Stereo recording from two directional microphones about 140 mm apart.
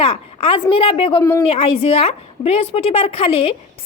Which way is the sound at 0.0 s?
45° left (ahead or behind).